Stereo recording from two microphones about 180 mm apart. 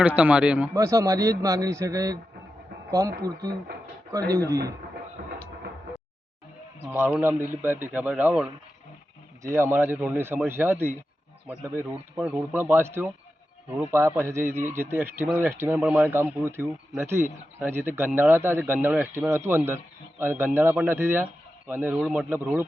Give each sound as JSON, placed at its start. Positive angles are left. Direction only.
{"t": 0.0, "sound": "speech", "side_deg": -10}
{"t": 5.2, "sound": "a sound", "side_deg": -60}
{"t": 6.8, "sound": "speech", "side_deg": -10}